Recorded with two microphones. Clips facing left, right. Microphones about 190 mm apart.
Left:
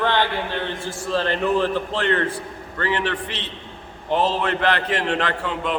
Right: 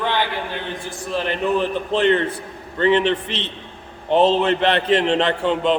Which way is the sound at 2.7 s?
20° right (ahead or behind).